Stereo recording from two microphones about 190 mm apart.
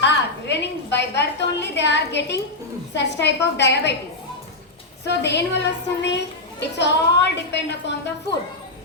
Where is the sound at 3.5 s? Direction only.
65° left (ahead or behind).